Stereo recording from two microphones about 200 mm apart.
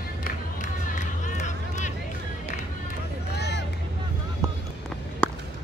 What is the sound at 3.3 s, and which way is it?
Vehicle, 55° left (ahead or behind).